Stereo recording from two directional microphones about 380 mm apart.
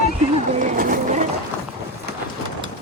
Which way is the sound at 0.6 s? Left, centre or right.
Right.